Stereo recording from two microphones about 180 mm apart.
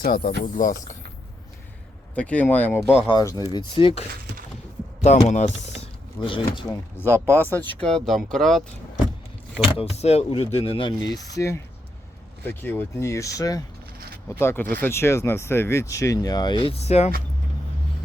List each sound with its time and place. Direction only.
0.0 s speech: 55° left (ahead or behind)
2.1 s speech: 5° left (ahead or behind); by 4.0 s 30° left (ahead or behind)
5.3 s speech: 40° left (ahead or behind)
6.1 s speech: 25° left (ahead or behind)
6.7 s speech: 10° left (ahead or behind)
9.7 s speech: 35° left (ahead or behind)